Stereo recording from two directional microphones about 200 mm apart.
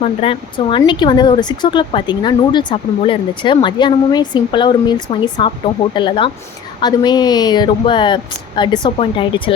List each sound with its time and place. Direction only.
0.0 s speech: 30° left (ahead or behind)